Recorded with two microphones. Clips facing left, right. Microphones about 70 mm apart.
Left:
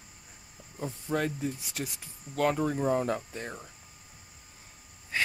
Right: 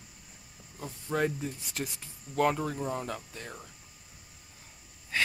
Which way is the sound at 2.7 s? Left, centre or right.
Left.